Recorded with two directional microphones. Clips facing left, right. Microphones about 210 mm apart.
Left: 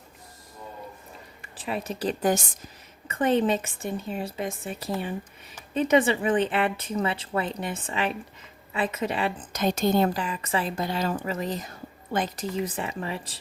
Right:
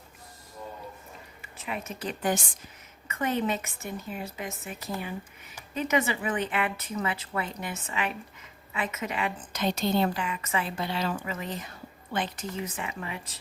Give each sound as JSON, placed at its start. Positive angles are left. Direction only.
{"t": 1.5, "sound": "a woman's voice", "side_deg": 35}
{"t": 9.6, "sound": "a woman's voice", "side_deg": 45}